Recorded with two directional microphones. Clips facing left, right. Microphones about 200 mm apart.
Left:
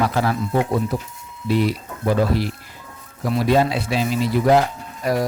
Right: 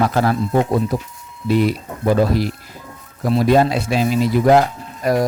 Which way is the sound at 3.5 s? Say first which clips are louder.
Right 2 dB; 45° right (ahead or behind).